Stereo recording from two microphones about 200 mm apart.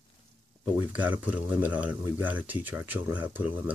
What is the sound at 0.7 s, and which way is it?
Speech, 10° right (ahead or behind).